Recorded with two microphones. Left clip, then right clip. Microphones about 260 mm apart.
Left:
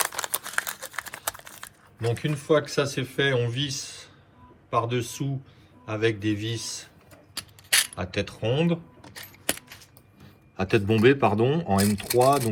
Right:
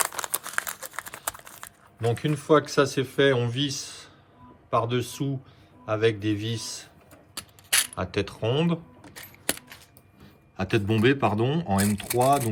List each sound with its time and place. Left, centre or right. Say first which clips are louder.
0.0 s crumpling: left 1 dB; centre
0.8 s a sound: left 2 dB; centre
2.1 s speech: right 2 dB; centre
7.3 s a sound: left 2 dB; centre
10.6 s speech: left 3 dB; centre
12.1 s speech: left 2 dB; centre